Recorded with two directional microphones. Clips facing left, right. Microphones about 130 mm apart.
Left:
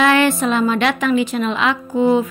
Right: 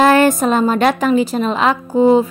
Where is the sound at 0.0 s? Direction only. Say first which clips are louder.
Right 3 dB; 40° right (ahead or behind).